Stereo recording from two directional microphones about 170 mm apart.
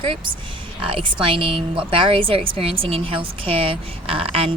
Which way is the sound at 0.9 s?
30° right (ahead or behind).